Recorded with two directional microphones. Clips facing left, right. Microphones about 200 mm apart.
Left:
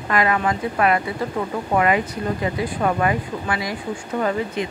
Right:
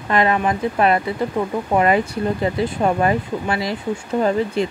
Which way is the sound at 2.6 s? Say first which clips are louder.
Right 2 dB; 25° right (ahead or behind).